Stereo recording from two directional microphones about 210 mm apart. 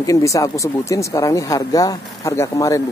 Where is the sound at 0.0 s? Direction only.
15° left (ahead or behind).